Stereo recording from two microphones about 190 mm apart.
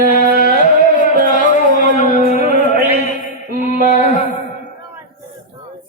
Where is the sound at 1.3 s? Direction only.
40° left (ahead or behind).